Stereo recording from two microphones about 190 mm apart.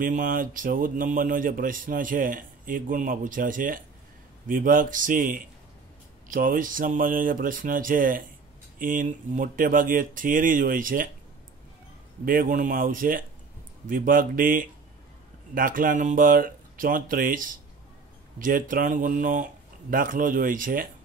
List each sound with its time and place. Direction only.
0.0 s speech: 45° right (ahead or behind)
12.3 s speech: 45° right (ahead or behind)